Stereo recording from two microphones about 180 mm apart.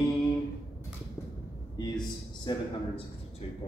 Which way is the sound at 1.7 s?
25° left (ahead or behind).